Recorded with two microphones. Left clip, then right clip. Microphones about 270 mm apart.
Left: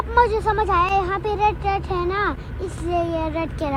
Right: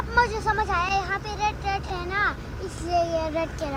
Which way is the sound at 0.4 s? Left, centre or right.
Left.